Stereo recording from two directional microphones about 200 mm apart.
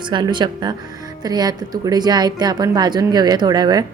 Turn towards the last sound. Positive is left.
turn(degrees=-20)  # may be behind; listen again after turning